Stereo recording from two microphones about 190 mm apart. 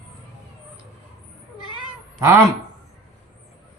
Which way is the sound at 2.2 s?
15° right (ahead or behind).